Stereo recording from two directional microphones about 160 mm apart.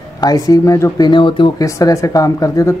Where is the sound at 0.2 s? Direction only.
25° left (ahead or behind).